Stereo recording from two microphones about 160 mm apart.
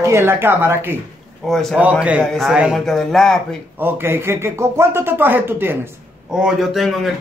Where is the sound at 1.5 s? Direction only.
Centre (ahead or behind).